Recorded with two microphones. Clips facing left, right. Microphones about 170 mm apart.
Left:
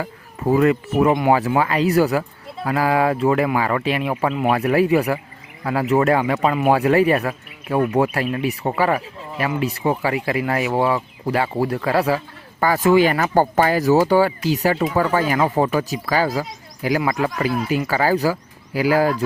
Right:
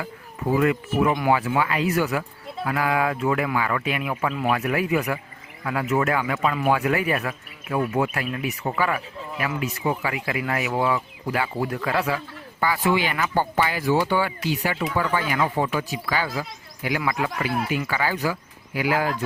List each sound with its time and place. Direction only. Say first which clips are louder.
0.0 s speech: left 5 dB; 40° left (ahead or behind)
1.1 s speech: left 5 dB; 25° left (ahead or behind)
1.4 s speech: left 5 dB; 40° left (ahead or behind)